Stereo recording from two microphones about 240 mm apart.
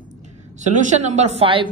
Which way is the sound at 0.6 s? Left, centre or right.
Right.